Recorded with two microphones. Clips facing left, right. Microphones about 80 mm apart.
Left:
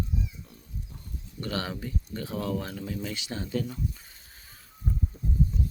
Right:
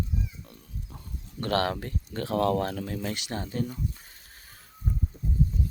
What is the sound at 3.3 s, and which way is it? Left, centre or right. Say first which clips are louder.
Speech: left 2 dB; right.